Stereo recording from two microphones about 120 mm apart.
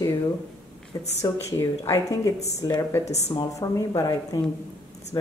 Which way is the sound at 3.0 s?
65° left (ahead or behind).